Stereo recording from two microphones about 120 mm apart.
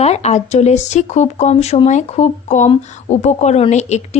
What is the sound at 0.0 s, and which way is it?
A woman's voice, 65° left (ahead or behind).